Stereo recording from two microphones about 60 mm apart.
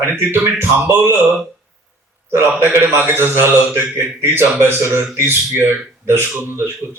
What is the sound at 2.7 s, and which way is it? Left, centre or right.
Speech, right.